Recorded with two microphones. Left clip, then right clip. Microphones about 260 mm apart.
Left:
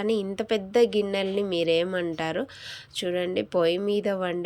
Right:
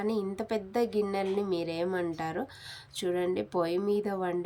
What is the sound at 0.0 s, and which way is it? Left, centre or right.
Speech, centre.